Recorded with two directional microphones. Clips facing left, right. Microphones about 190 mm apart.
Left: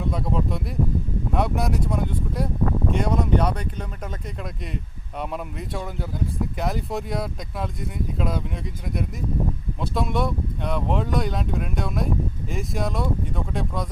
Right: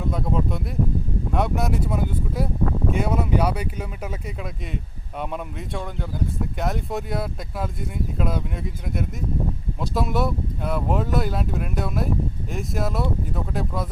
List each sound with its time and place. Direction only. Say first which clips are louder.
0.0 s speech: right 1 dB; centre (ahead or behind)
5.2 s speech: even; centre (ahead or behind)